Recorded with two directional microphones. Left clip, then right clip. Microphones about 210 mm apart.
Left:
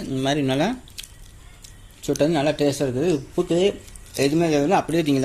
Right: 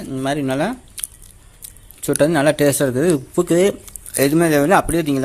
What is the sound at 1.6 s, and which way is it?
Speech, 20° right (ahead or behind).